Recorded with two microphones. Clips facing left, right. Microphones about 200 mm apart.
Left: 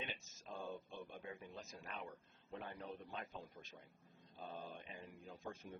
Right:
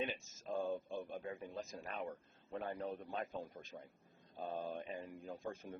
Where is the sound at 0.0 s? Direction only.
45° right (ahead or behind).